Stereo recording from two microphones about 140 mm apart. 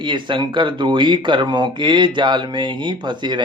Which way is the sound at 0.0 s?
35° right (ahead or behind).